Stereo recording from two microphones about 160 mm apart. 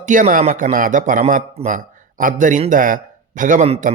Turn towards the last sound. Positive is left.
turn(degrees=-50)  # may be behind; listen again after turning